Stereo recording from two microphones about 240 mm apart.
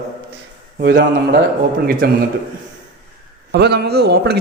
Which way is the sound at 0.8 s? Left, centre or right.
Right.